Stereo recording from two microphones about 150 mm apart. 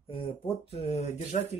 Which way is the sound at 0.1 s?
40° left (ahead or behind).